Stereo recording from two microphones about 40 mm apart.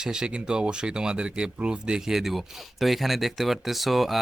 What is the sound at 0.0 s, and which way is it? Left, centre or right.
Speech, centre.